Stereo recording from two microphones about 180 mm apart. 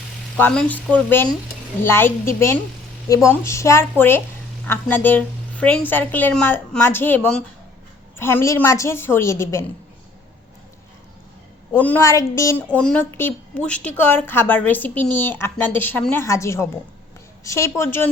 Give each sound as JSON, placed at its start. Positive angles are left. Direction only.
{"t": 0.3, "sound": "a woman's voice", "side_deg": 10}
{"t": 11.7, "sound": "a woman's voice", "side_deg": 10}
{"t": 12.6, "sound": "a woman's voice", "side_deg": 5}